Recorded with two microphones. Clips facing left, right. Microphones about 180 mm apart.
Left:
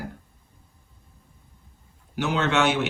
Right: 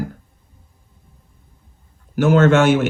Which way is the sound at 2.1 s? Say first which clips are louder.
Right 10 dB; 50° right (ahead or behind).